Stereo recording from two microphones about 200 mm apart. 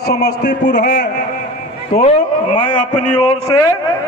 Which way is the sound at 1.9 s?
30° left (ahead or behind).